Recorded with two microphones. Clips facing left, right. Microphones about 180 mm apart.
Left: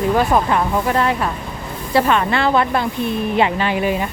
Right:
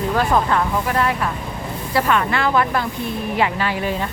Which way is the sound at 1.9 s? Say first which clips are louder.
Left 3 dB; 25° left (ahead or behind).